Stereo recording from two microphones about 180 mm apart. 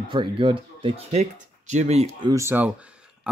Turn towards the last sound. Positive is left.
turn(degrees=-5)  # may be behind; listen again after turning